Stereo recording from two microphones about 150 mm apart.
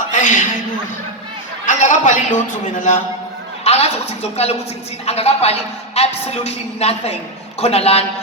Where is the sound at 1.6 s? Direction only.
55° left (ahead or behind).